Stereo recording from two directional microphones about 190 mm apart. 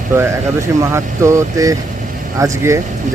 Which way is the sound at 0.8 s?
15° right (ahead or behind).